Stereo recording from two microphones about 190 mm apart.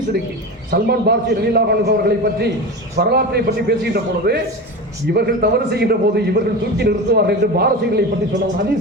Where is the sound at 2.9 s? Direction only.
55° right (ahead or behind).